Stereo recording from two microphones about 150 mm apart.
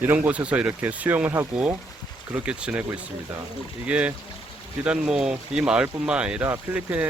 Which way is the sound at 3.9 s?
10° right (ahead or behind).